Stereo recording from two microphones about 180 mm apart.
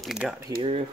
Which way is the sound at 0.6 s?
30° right (ahead or behind).